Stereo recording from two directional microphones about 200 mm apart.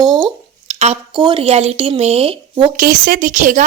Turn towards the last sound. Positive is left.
turn(degrees=-40)  # may be behind; listen again after turning